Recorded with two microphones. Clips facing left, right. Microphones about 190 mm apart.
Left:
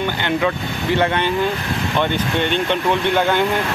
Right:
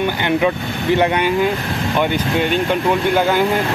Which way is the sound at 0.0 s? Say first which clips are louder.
Right 3 dB; 15° right (ahead or behind).